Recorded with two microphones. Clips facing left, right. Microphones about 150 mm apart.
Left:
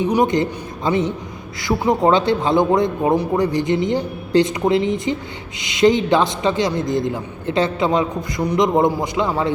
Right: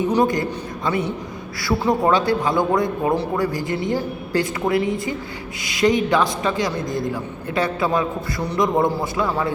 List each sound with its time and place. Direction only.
0.0 s a man's voice: 15° left (ahead or behind)